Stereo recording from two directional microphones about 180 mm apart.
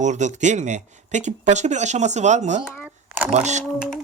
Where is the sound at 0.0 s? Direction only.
40° right (ahead or behind).